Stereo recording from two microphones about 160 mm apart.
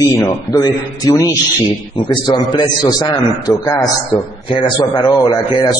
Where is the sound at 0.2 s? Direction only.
20° left (ahead or behind).